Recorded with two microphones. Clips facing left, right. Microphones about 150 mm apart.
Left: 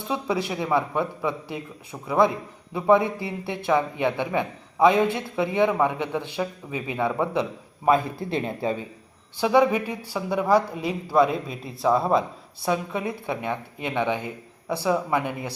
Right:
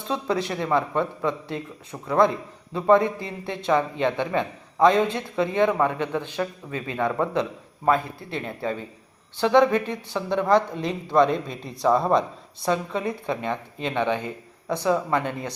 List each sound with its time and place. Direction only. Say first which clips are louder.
0.1 s a man's voice: right 1 dB; 5° left (ahead or behind)